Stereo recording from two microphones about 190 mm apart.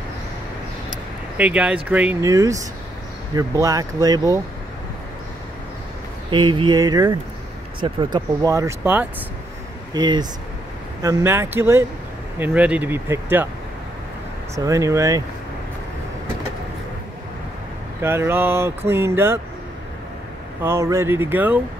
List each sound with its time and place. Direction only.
1.4 s speech: 5° right (ahead or behind)
6.3 s speech: 25° right (ahead or behind)
14.5 s speech: 15° right (ahead or behind)
18.0 s speech: 10° right (ahead or behind)
20.6 s speech: 15° right (ahead or behind)